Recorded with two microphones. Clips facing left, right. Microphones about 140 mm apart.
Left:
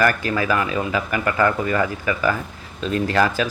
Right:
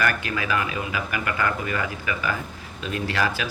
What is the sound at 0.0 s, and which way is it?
Speech, 40° left (ahead or behind).